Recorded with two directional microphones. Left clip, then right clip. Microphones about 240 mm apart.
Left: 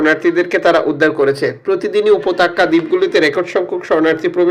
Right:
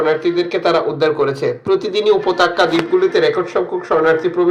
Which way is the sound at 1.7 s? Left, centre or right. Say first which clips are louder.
Right 1 dB; left.